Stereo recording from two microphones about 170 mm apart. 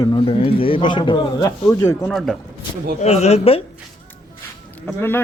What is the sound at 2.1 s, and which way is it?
Speech, centre (ahead or behind).